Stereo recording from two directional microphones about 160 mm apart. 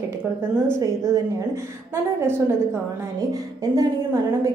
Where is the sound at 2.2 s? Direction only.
15° right (ahead or behind).